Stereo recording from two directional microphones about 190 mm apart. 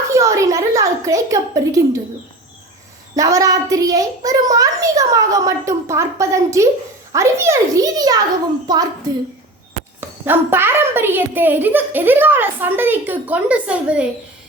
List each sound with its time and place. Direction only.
0.1 s a sound: 15° right (ahead or behind)
3.2 s a woman's voice: 15° right (ahead or behind)
10.2 s a woman's voice: 10° right (ahead or behind)